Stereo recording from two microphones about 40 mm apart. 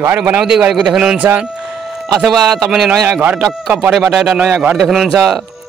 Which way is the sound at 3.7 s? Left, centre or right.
Right.